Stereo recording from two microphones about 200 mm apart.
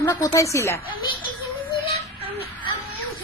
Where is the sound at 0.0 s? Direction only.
15° left (ahead or behind).